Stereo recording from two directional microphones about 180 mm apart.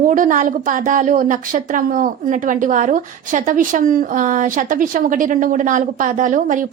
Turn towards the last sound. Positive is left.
turn(degrees=-45)  # may be behind; listen again after turning